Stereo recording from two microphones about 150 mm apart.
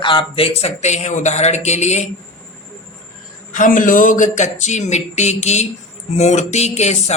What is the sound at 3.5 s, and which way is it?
Speech, 60° left (ahead or behind).